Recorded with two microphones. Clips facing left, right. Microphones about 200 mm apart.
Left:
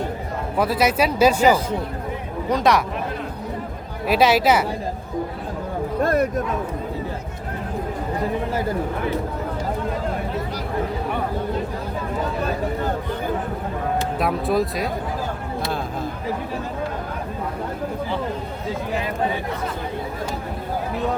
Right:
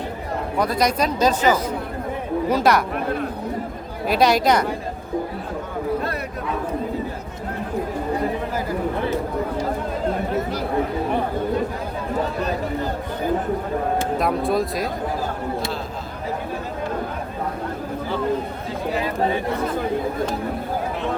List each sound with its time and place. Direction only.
0.6 s speech: 5° left (ahead or behind)
2.5 s speech: 5° right (ahead or behind)
4.0 s speech: centre (ahead or behind)
6.0 s a sound: 45° left (ahead or behind)
14.2 s speech: centre (ahead or behind)